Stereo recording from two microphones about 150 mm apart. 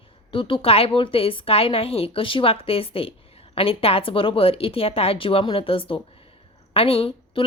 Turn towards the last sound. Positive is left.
turn(degrees=40)  # may be behind; listen again after turning